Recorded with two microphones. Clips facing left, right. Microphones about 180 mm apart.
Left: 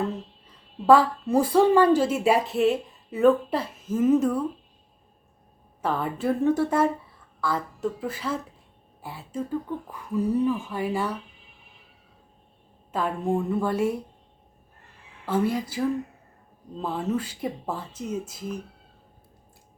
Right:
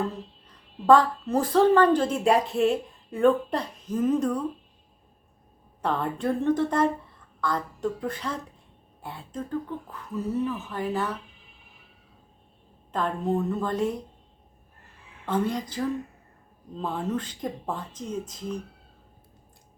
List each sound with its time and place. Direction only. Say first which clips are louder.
0.0 s a woman's voice: left 1 dB; 5° left (ahead or behind)
5.8 s a woman's voice: left 1 dB; 5° left (ahead or behind)
12.9 s speech: left 1 dB; 5° left (ahead or behind)
15.3 s speech: left 2 dB; 5° left (ahead or behind)